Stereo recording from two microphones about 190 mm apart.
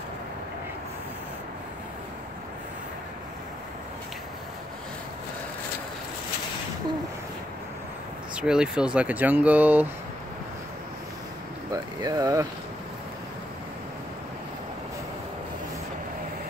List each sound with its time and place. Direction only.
8.4 s speech: 5° right (ahead or behind)
11.7 s speech: 20° right (ahead or behind)